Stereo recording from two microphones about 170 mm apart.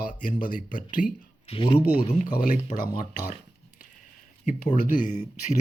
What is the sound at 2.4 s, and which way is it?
Speech, 50° left (ahead or behind).